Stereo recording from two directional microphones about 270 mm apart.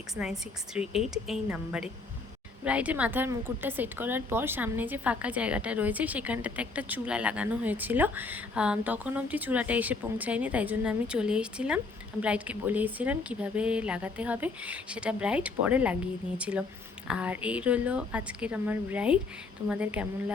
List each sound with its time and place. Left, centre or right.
0.2 s a woman's voice: centre